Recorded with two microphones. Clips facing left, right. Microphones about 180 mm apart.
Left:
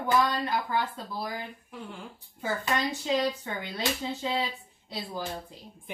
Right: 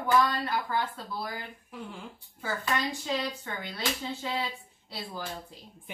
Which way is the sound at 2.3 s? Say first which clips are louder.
Left 2 dB; 20° left (ahead or behind).